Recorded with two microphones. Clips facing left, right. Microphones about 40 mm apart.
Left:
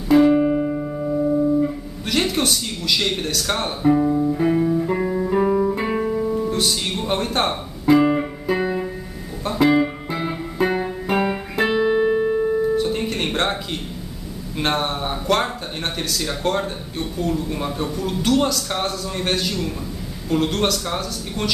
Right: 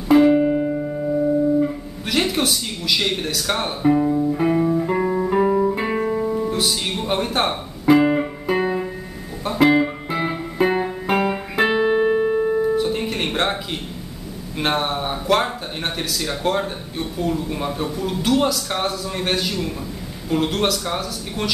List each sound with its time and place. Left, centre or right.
0.1 s music: centre
11.5 s guitar: centre
14.6 s speech: centre